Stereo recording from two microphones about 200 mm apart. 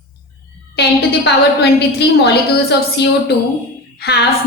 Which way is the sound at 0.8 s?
55° left (ahead or behind).